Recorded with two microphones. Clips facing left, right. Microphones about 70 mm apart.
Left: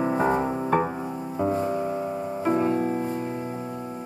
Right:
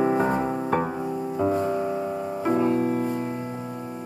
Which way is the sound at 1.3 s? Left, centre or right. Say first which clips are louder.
Right 1 dB; centre.